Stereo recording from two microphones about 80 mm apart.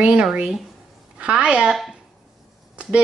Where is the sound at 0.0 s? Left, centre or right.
Centre.